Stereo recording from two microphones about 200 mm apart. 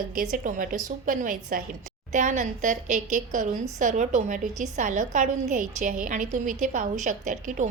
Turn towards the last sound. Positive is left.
turn(degrees=-40)  # may be behind; listen again after turning